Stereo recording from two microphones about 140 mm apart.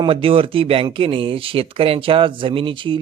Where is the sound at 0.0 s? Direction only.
40° right (ahead or behind).